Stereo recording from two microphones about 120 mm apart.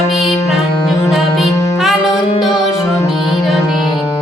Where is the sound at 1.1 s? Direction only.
Centre (ahead or behind).